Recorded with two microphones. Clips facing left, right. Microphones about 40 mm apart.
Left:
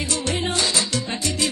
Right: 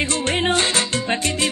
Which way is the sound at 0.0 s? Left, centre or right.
Right.